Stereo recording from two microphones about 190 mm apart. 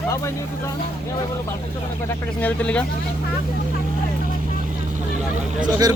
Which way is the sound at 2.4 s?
5° left (ahead or behind).